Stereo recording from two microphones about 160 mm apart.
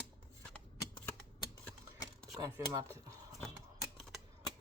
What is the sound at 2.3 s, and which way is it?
Speech, 20° right (ahead or behind).